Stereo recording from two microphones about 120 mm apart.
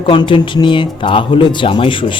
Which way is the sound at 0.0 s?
45° left (ahead or behind).